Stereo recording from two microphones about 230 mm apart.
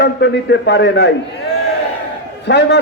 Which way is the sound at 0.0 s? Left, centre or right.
Left.